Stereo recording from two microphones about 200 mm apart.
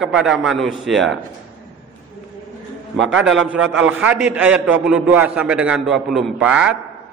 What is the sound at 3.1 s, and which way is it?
A man's voice, 5° right (ahead or behind).